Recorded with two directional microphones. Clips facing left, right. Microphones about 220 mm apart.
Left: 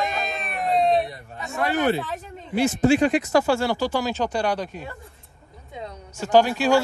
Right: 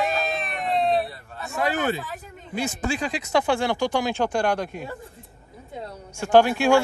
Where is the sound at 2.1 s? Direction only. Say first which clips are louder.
Left 5 dB; 30° left (ahead or behind).